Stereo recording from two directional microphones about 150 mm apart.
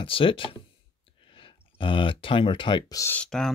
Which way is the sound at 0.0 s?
35° left (ahead or behind).